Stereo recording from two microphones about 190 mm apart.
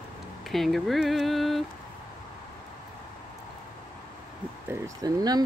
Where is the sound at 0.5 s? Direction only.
Centre (ahead or behind).